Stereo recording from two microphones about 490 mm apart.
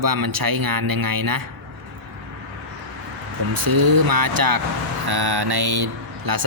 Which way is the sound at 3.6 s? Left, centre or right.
Right.